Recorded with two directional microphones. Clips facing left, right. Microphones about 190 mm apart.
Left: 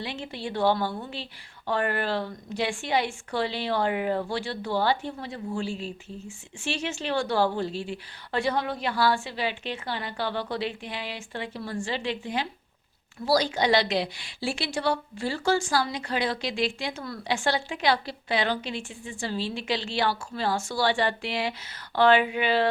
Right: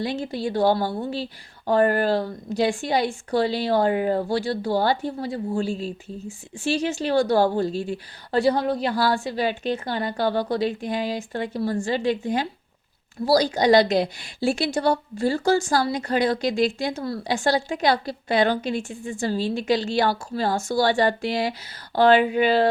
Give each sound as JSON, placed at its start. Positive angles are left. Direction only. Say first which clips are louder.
{"t": 0.0, "sound": "a woman's voice", "louder": "right 8 dB", "side_deg": -40}